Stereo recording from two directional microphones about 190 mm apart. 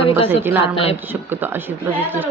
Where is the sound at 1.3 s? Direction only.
10° right (ahead or behind).